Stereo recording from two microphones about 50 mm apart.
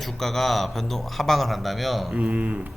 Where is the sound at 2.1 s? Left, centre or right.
Right.